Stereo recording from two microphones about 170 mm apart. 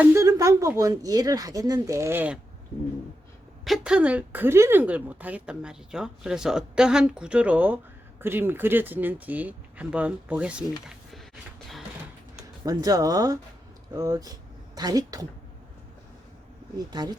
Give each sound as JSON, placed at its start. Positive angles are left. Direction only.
{"t": 0.0, "sound": "a sound", "side_deg": -15}
{"t": 0.8, "sound": "speech", "side_deg": -20}
{"t": 3.6, "sound": "a woman's voice", "side_deg": -5}
{"t": 12.6, "sound": "speech", "side_deg": -20}
{"t": 16.7, "sound": "speech", "side_deg": -25}